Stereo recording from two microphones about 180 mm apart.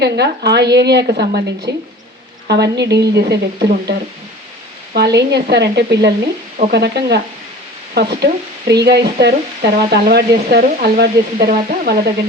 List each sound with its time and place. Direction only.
0.0 s a woman's voice: 65° right (ahead or behind)
4.9 s a woman's voice: 65° right (ahead or behind)